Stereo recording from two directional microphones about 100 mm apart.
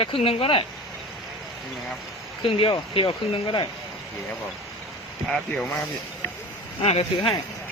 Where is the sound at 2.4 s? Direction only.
65° left (ahead or behind).